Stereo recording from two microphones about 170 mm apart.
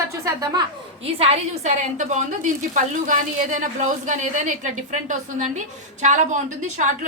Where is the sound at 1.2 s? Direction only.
40° right (ahead or behind).